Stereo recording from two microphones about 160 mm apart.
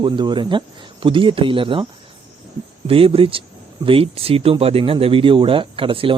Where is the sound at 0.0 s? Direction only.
30° right (ahead or behind).